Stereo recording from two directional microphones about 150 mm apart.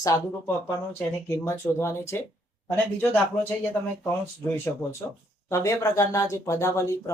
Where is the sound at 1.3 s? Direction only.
20° left (ahead or behind).